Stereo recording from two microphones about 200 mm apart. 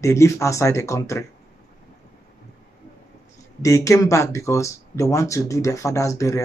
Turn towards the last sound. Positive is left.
turn(degrees=15)  # may be behind; listen again after turning